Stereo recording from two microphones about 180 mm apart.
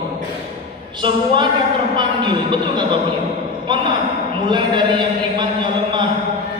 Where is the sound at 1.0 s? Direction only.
25° right (ahead or behind).